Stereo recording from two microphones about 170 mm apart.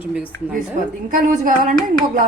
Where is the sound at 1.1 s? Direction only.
50° right (ahead or behind).